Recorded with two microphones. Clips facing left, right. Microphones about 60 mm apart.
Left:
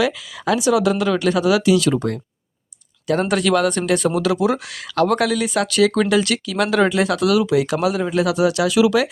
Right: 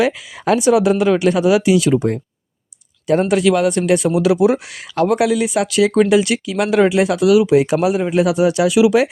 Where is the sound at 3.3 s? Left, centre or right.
Centre.